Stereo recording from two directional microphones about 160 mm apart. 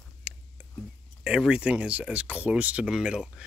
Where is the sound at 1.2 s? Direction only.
5° right (ahead or behind).